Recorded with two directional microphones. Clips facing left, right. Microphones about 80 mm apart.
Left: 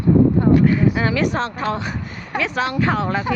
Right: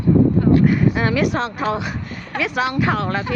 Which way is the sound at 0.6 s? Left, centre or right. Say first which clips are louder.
Even; centre.